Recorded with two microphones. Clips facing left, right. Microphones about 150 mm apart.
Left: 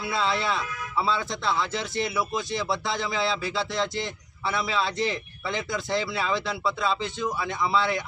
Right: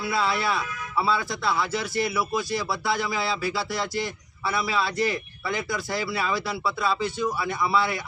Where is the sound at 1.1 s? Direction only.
20° left (ahead or behind).